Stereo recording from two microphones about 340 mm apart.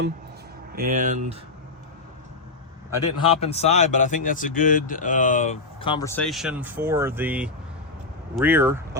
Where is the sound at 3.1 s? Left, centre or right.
Centre.